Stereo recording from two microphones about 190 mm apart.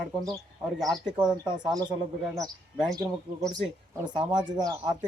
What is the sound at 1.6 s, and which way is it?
Speech, 20° right (ahead or behind).